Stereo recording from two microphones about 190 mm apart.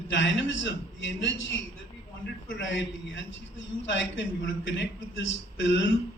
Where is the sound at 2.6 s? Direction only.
70° left (ahead or behind).